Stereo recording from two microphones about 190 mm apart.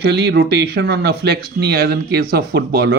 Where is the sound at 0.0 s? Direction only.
60° right (ahead or behind).